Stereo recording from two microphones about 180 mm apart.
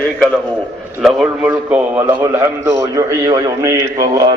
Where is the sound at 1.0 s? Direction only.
5° right (ahead or behind).